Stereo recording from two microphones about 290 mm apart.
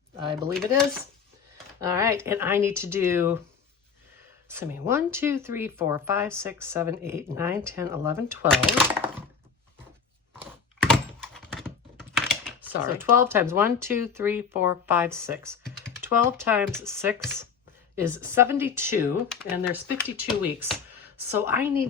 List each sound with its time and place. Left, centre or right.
0.2 s speech: centre
1.8 s speech: centre
4.4 s speech: centre
10.4 s computer keyboard: centre
12.8 s speech: centre